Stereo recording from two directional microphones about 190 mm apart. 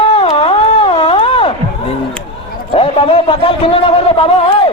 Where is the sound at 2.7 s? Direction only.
30° left (ahead or behind).